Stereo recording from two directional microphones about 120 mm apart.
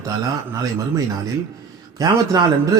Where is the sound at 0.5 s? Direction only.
30° right (ahead or behind).